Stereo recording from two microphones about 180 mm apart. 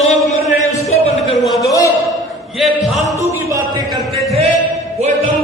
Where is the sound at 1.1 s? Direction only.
Centre (ahead or behind).